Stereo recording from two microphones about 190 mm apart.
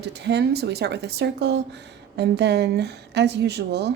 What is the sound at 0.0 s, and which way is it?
Speech, 65° right (ahead or behind).